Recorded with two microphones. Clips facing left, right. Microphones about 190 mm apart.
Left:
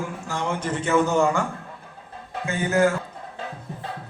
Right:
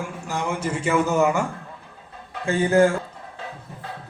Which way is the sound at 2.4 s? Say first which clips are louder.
Right 3 dB; 30° right (ahead or behind).